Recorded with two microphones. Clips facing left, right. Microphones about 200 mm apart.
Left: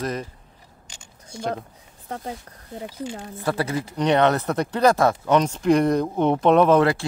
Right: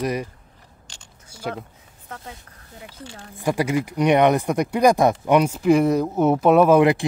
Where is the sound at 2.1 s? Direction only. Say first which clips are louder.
Left 6 dB; 30° left (ahead or behind).